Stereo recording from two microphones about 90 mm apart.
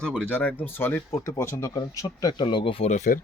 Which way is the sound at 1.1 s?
35° left (ahead or behind).